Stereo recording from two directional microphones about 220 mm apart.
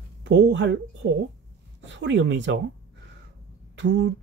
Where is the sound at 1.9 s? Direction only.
55° right (ahead or behind).